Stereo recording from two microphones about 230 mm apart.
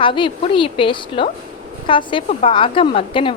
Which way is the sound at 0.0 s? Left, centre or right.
Left.